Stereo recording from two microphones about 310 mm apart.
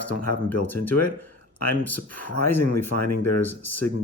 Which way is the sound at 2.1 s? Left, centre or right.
Left.